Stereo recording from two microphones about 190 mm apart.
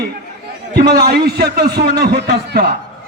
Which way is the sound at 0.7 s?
55° right (ahead or behind).